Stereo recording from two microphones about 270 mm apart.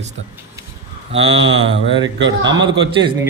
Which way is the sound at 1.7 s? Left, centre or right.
Right.